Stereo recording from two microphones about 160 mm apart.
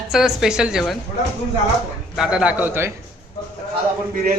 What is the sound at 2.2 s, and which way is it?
Speech, 5° right (ahead or behind).